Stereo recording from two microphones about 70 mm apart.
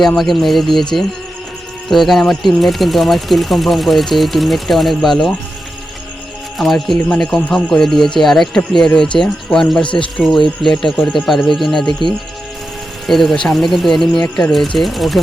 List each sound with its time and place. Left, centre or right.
0.2 s speech: centre
1.9 s speech: centre
6.6 s speech: centre
13.1 s speech: centre